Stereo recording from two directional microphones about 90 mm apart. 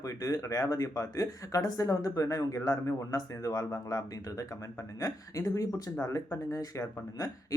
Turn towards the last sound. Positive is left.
turn(degrees=40)  # may be behind; listen again after turning